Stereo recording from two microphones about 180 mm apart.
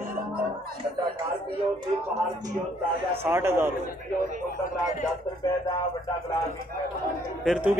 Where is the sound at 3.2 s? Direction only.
15° right (ahead or behind).